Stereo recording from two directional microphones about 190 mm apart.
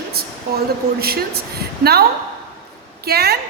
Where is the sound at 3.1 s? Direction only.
55° right (ahead or behind).